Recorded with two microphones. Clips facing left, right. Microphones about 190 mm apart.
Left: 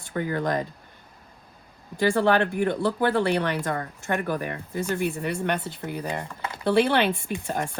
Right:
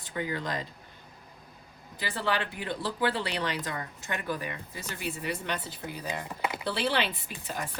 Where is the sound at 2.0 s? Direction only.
50° left (ahead or behind).